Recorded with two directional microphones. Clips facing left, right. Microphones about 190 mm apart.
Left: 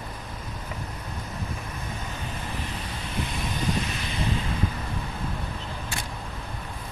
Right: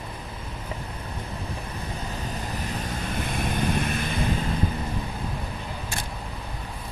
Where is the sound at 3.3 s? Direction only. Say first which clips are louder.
Right 4 dB; 55° right (ahead or behind).